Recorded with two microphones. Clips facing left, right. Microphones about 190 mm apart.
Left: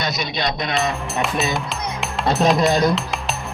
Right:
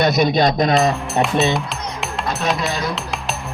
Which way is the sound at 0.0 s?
55° right (ahead or behind).